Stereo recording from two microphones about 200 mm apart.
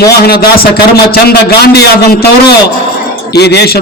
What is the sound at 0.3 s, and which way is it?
A man's voice, 50° left (ahead or behind).